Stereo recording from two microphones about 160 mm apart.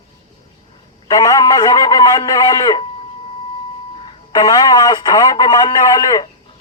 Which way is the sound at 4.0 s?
30° left (ahead or behind).